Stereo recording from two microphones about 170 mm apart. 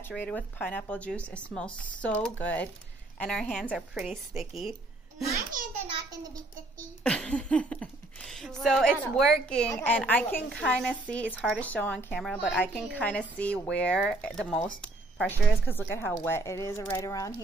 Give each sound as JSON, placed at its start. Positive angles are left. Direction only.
{"t": 0.0, "sound": "a woman's voice", "side_deg": 10}
{"t": 5.6, "sound": "a sound", "side_deg": -55}
{"t": 7.0, "sound": "a woman's voice", "side_deg": 5}